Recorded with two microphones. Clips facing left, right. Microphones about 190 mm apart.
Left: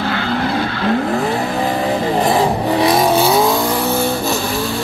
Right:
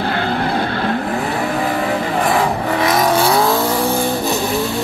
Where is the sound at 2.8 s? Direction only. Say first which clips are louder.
Left 2 dB; 30° left (ahead or behind).